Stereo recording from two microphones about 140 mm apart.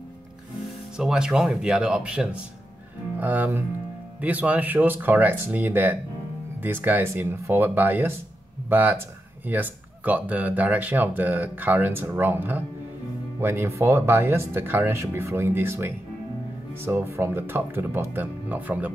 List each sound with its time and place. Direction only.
0.9 s speech: 5° right (ahead or behind)